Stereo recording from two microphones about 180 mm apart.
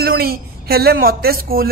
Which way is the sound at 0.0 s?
60° right (ahead or behind).